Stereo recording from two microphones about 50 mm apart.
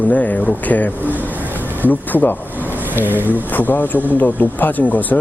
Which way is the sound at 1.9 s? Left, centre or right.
Left.